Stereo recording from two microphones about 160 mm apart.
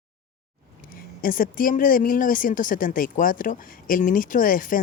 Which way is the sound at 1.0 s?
65° left (ahead or behind).